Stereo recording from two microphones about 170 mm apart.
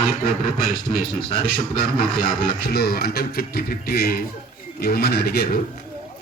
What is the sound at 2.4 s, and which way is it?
Speech, 65° left (ahead or behind).